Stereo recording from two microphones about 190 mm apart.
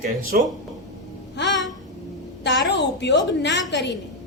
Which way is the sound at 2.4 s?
65° left (ahead or behind).